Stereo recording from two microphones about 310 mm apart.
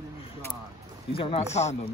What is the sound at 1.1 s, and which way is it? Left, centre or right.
Speech, centre.